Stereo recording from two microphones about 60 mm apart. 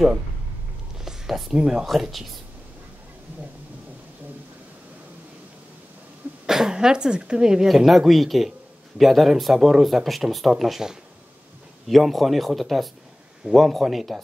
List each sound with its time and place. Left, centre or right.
0.9 s a sound: centre
1.6 s a woman's voice: centre
6.4 s a woman's voice: centre